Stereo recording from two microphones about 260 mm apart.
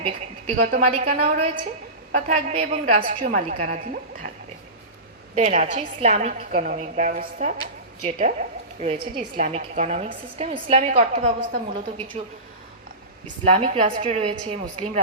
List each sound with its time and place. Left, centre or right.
0.0 s a woman's voice: right
5.3 s a woman's voice: right
11.9 s a woman's voice: centre
13.4 s a woman's voice: right